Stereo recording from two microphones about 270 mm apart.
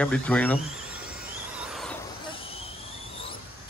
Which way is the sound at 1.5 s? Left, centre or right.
Centre.